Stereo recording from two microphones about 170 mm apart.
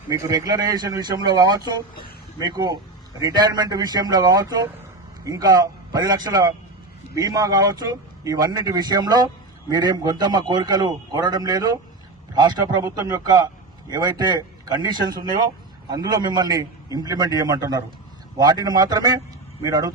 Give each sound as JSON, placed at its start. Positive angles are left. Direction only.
{"t": 0.1, "sound": "a man's voice", "side_deg": -20}